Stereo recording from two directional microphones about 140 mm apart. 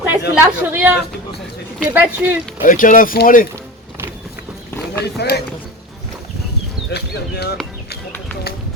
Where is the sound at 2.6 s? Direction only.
75° left (ahead or behind).